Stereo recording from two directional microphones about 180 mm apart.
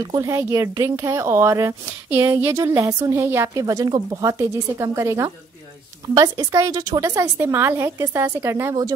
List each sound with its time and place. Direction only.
0.0 s speech: 20° right (ahead or behind)